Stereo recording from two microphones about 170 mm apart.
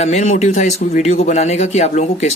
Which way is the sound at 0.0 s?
40° left (ahead or behind).